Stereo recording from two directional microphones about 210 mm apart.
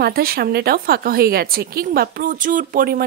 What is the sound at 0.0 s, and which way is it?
A woman's voice, 45° right (ahead or behind).